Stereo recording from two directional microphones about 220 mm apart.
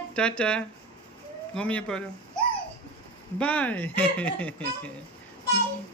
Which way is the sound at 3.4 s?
5° left (ahead or behind).